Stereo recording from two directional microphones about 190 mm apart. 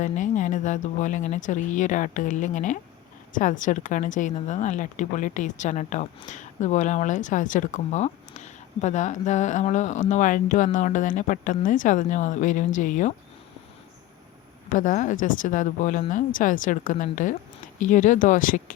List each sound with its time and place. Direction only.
0.0 s speech: 40° left (ahead or behind)
14.7 s a woman's voice: 45° left (ahead or behind)